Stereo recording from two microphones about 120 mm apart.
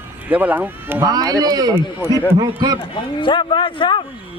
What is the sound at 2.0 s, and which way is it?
Speech, 20° right (ahead or behind).